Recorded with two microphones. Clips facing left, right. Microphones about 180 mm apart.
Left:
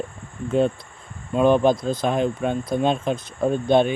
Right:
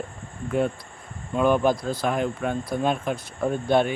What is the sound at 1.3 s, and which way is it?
Speech, 20° left (ahead or behind).